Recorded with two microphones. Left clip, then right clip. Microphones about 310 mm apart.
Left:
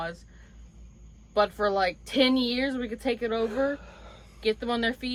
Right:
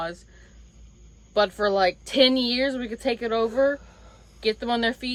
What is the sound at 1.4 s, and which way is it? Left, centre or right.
A woman's voice, right.